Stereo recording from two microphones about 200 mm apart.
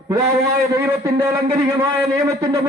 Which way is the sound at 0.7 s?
15° right (ahead or behind).